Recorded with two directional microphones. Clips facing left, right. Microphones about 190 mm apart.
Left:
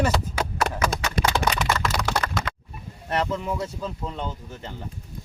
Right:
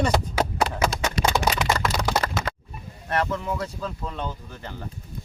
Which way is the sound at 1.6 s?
35° right (ahead or behind).